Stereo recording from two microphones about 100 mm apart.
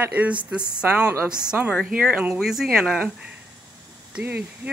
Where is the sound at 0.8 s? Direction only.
10° right (ahead or behind).